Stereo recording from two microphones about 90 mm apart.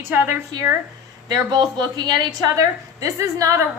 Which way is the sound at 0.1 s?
20° right (ahead or behind).